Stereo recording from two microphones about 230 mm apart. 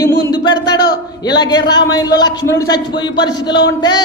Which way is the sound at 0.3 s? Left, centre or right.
Centre.